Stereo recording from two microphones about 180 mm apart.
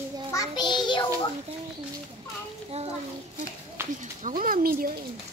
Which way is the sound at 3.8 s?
15° right (ahead or behind).